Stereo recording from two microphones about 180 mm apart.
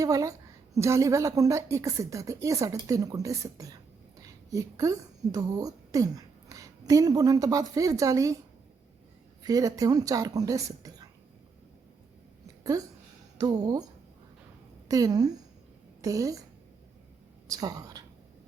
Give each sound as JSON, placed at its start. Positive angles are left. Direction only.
{"t": 0.0, "sound": "a woman's voice", "side_deg": -20}
{"t": 9.4, "sound": "a woman's voice", "side_deg": -20}
{"t": 12.7, "sound": "a woman's voice", "side_deg": -20}
{"t": 14.8, "sound": "a woman's voice", "side_deg": -20}
{"t": 17.5, "sound": "a woman's voice", "side_deg": -20}